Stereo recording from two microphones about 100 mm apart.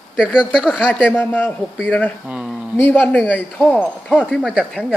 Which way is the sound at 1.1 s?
20° left (ahead or behind).